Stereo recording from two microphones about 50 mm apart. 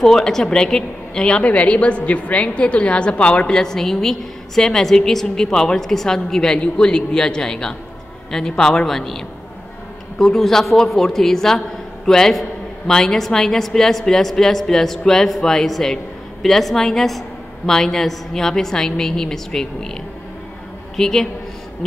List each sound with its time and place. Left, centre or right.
0.0 s a woman's voice: centre
1.4 s a woman's voice: left; by 21.3 s centre